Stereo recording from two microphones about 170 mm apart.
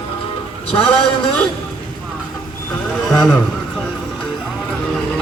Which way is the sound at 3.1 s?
5° left (ahead or behind).